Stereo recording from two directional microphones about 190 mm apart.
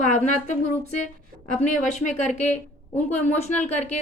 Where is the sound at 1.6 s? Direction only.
40° left (ahead or behind).